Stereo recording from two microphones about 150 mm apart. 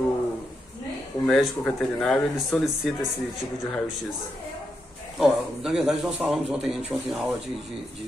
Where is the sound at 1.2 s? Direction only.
5° left (ahead or behind).